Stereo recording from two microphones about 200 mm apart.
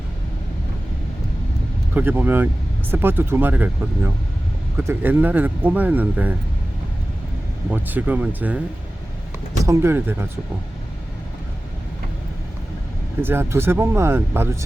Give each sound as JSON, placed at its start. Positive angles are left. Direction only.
{"t": 2.0, "sound": "speech", "side_deg": -10}
{"t": 7.7, "sound": "speech", "side_deg": -10}
{"t": 9.6, "sound": "speech", "side_deg": -10}
{"t": 13.2, "sound": "speech", "side_deg": -10}